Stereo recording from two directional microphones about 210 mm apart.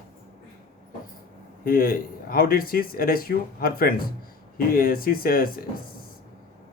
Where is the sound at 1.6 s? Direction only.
45° left (ahead or behind).